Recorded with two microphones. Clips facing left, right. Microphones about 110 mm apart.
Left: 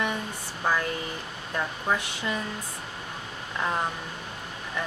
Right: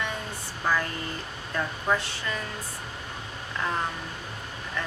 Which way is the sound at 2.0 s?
15° left (ahead or behind).